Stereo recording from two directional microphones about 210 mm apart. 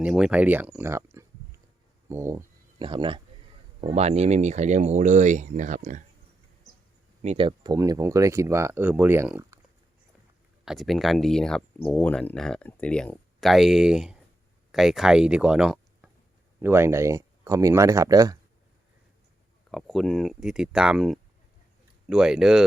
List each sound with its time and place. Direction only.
0.0 s speech: 5° right (ahead or behind)
2.0 s a sound: 10° right (ahead or behind)
2.8 s speech: 25° right (ahead or behind)
7.2 s speech: 30° right (ahead or behind); by 9.6 s 10° right (ahead or behind)
10.7 s speech: centre (ahead or behind); by 18.3 s 15° right (ahead or behind)
19.7 s speech: centre (ahead or behind)